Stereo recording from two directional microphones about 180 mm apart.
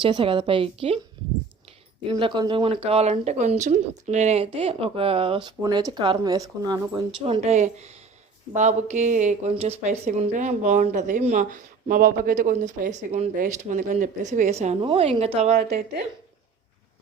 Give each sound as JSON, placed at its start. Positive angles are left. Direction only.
{"t": 0.0, "sound": "a woman's voice", "side_deg": -30}
{"t": 2.0, "sound": "a woman's voice", "side_deg": -25}
{"t": 7.3, "sound": "speech", "side_deg": -35}